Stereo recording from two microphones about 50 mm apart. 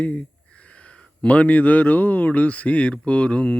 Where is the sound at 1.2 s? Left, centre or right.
Left.